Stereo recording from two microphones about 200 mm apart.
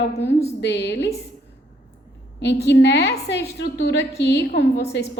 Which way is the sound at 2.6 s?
60° left (ahead or behind).